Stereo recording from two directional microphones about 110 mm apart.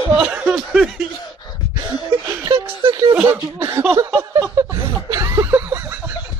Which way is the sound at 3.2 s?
25° right (ahead or behind).